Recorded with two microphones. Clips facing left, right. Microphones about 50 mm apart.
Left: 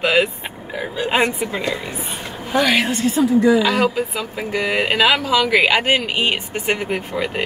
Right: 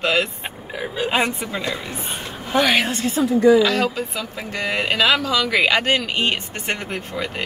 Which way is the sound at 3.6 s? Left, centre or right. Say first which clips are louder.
Left 1 dB; centre.